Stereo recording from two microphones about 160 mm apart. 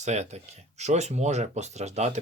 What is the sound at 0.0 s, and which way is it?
Speech, 45° right (ahead or behind).